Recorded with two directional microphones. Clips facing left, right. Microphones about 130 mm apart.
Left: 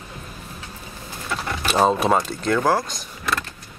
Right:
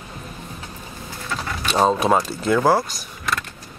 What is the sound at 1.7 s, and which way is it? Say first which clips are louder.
Speech: right 1 dB; centre (ahead or behind).